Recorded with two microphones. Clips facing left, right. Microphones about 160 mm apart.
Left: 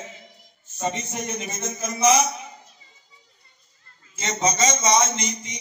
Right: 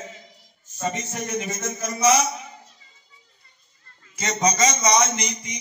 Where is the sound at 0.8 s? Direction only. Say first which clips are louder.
Even; 20° left (ahead or behind).